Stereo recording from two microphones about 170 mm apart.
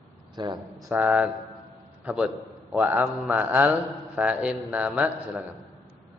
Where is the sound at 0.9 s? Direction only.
10° right (ahead or behind).